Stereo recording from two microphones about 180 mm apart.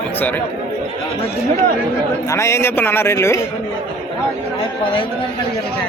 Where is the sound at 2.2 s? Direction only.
15° left (ahead or behind).